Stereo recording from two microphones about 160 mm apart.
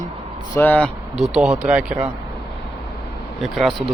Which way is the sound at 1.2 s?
5° right (ahead or behind).